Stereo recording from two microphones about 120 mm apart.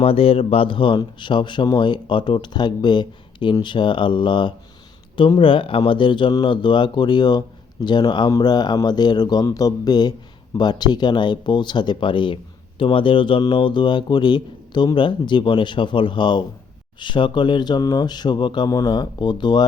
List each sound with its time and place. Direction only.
0.0 s a man's voice: 50° left (ahead or behind)